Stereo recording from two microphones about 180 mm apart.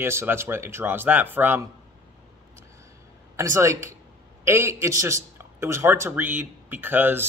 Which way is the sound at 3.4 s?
15° right (ahead or behind).